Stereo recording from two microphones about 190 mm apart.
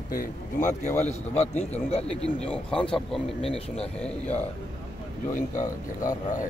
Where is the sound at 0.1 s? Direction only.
50° left (ahead or behind).